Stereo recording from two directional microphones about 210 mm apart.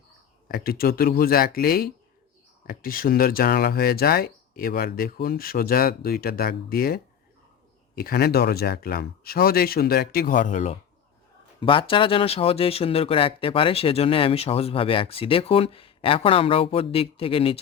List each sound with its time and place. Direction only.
0.4 s speech: 45° left (ahead or behind); by 17.6 s 25° left (ahead or behind)